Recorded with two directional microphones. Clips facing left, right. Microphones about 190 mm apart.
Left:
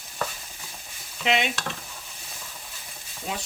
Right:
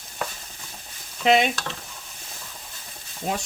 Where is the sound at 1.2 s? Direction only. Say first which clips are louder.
Right 6 dB; 40° right (ahead or behind).